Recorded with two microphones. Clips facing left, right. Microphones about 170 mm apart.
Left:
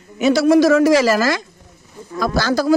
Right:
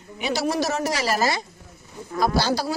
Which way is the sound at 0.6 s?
90° left.